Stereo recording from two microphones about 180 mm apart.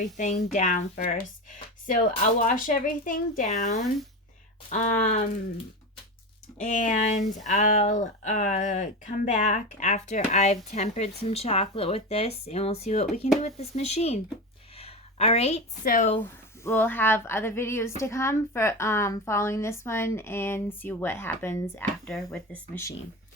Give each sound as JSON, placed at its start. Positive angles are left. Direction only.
{"t": 0.0, "sound": "speech", "side_deg": 45}
{"t": 6.7, "sound": "a woman's voice", "side_deg": 45}
{"t": 15.9, "sound": "speech", "side_deg": 45}
{"t": 16.2, "sound": "a woman's voice", "side_deg": 10}